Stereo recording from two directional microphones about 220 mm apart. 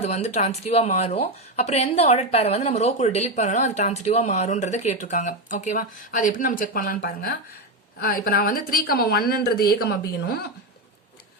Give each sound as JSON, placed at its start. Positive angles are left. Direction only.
{"t": 0.0, "sound": "a woman's voice", "side_deg": 30}